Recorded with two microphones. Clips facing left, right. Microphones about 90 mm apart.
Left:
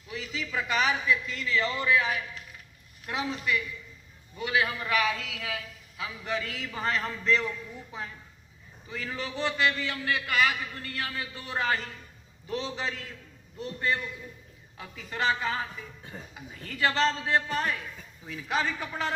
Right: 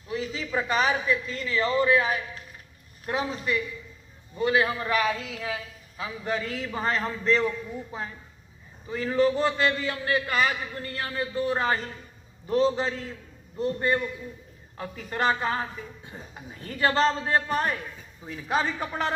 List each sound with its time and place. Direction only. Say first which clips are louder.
0.1 s a man's voice: right 5 dB; 35° right (ahead or behind)
8.9 s a man's voice: right 12 dB; 35° right (ahead or behind)
14.8 s a man's voice: right 4 dB; 40° right (ahead or behind)